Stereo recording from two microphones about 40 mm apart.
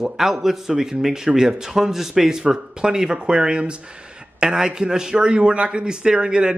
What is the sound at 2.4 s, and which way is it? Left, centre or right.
A man's voice, centre.